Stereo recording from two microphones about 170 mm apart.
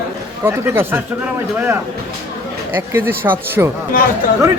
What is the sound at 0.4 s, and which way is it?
Speech, 15° right (ahead or behind).